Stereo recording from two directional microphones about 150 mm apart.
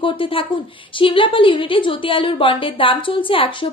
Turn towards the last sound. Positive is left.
turn(degrees=35)  # may be behind; listen again after turning